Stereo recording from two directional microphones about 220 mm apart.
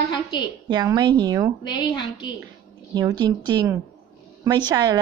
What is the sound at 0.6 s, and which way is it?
Speech, 20° right (ahead or behind).